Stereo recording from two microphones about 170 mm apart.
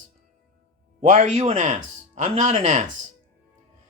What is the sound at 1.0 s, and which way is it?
Speech, 40° right (ahead or behind).